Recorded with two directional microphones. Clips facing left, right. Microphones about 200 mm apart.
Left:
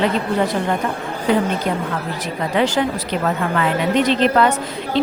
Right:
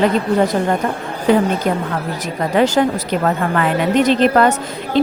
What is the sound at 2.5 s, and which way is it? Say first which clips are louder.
A woman's voice: right 4 dB; 45° right (ahead or behind).